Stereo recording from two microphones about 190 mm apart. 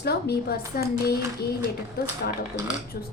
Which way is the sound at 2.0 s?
50° left (ahead or behind).